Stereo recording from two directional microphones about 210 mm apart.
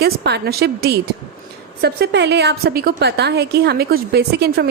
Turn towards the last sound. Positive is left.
turn(degrees=-50)  # may be behind; listen again after turning